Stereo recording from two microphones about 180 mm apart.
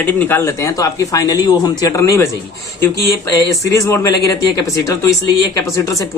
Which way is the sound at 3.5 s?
20° left (ahead or behind).